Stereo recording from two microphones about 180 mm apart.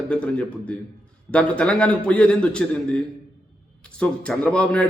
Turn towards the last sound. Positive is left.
turn(degrees=5)  # may be behind; listen again after turning